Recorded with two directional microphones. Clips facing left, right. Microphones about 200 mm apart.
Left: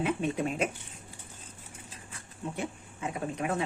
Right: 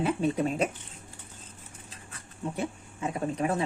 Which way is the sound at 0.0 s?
35° right (ahead or behind).